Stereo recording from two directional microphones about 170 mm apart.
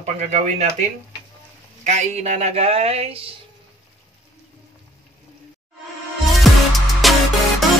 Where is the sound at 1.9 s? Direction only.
40° right (ahead or behind).